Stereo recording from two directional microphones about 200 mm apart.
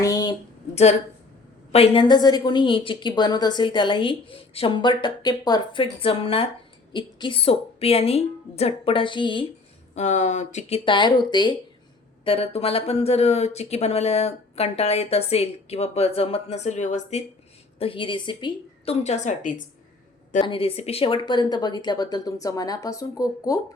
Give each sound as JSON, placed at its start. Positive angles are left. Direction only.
{"t": 0.0, "sound": "a sound", "side_deg": 20}
{"t": 1.7, "sound": "a woman's voice", "side_deg": 30}
{"t": 9.9, "sound": "speech", "side_deg": 35}
{"t": 10.8, "sound": "a woman's voice", "side_deg": 25}
{"t": 20.4, "sound": "a woman's voice", "side_deg": 25}